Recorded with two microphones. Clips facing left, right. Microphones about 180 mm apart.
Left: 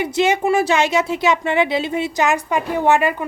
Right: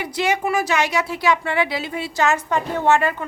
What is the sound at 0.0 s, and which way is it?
A woman's voice, 25° left (ahead or behind).